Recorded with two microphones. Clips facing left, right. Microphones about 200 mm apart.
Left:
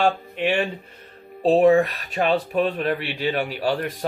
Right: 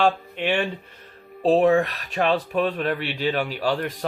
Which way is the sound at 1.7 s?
25° left (ahead or behind).